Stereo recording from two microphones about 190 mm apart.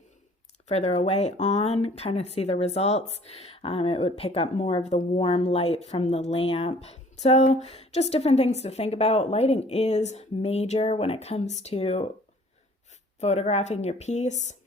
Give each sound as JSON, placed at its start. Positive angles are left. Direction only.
{"t": 0.7, "sound": "speech", "side_deg": 35}
{"t": 13.1, "sound": "speech", "side_deg": 35}